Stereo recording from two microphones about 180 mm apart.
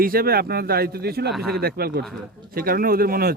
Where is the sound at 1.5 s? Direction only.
60° right (ahead or behind).